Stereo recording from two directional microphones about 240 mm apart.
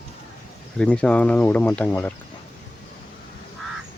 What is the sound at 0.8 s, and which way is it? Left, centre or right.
Speech, centre.